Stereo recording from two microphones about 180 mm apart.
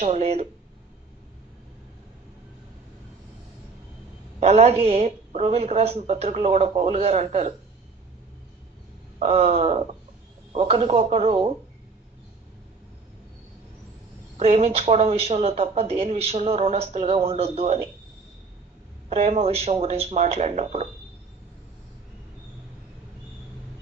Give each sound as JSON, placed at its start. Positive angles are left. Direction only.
{"t": 0.0, "sound": "speech", "side_deg": -35}
{"t": 4.4, "sound": "speech", "side_deg": -35}
{"t": 9.1, "sound": "speech", "side_deg": -35}
{"t": 14.3, "sound": "speech", "side_deg": -35}
{"t": 19.0, "sound": "speech", "side_deg": -35}